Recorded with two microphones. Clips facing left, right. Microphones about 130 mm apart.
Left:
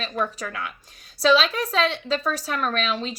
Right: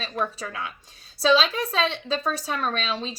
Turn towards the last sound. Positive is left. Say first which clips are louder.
# left 2 dB
turn(degrees=-30)  # may be behind; listen again after turning